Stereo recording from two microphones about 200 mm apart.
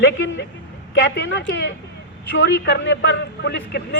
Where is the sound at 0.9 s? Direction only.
60° left (ahead or behind).